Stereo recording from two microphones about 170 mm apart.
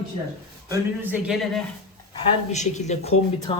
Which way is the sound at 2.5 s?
45° left (ahead or behind).